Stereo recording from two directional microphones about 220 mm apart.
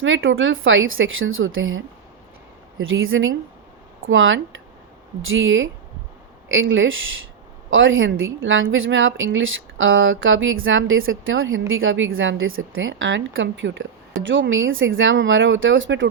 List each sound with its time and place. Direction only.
0.0 s a woman's voice: 60° right (ahead or behind)